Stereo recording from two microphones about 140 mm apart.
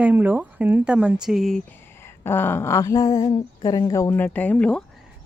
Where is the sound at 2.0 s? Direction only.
15° left (ahead or behind).